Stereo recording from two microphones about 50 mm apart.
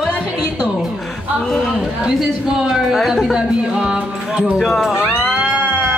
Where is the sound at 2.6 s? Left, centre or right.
Centre.